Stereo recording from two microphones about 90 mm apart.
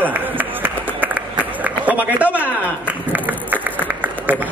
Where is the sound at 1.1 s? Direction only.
20° right (ahead or behind).